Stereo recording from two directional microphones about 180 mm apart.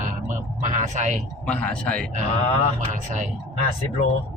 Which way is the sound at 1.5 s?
5° left (ahead or behind).